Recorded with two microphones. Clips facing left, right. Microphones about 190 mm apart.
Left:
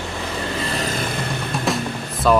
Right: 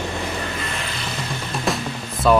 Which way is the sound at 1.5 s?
Centre (ahead or behind).